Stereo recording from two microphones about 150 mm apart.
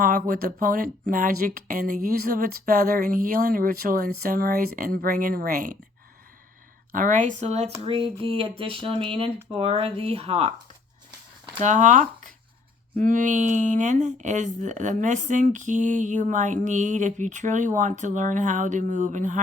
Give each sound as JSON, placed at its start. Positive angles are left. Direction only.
{"t": 0.0, "sound": "speech", "side_deg": -65}
{"t": 6.9, "sound": "speech", "side_deg": -60}
{"t": 7.8, "sound": "speech", "side_deg": -40}
{"t": 11.6, "sound": "speech", "side_deg": -55}